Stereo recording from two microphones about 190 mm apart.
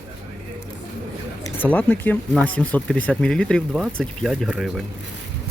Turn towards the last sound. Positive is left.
turn(degrees=-5)  # may be behind; listen again after turning